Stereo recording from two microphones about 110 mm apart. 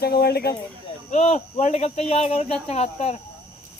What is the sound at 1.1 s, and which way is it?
Speech, 90° left.